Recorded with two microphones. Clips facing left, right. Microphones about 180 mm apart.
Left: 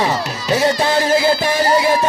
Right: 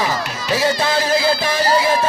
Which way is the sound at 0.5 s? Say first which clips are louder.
Left 3 dB; 20° left (ahead or behind).